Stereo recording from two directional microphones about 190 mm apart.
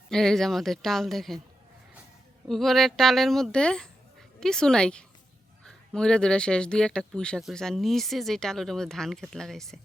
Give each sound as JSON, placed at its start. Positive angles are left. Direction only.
{"t": 0.1, "sound": "speech", "side_deg": 0}
{"t": 2.5, "sound": "speech", "side_deg": 0}